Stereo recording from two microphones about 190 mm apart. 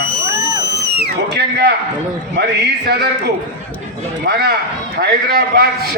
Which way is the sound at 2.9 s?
60° right (ahead or behind).